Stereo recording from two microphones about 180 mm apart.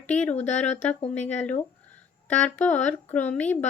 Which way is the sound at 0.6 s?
40° left (ahead or behind).